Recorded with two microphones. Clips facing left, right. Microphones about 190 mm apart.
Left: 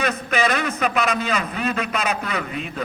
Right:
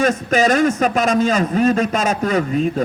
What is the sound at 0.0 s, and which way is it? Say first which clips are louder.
A man's voice: right 6 dB; 45° right (ahead or behind).